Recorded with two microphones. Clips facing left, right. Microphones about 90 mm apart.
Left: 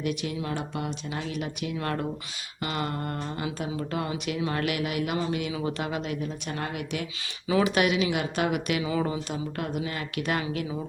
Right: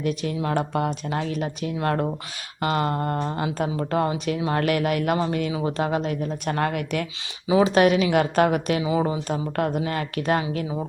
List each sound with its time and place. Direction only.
0.0 s speech: 40° right (ahead or behind)
4.1 s speech: 30° right (ahead or behind)
4.6 s speech: 45° right (ahead or behind)
7.4 s speech: 20° right (ahead or behind)
7.7 s speech: 40° right (ahead or behind)
9.0 s speech: 30° right (ahead or behind)
9.3 s speech: 45° right (ahead or behind)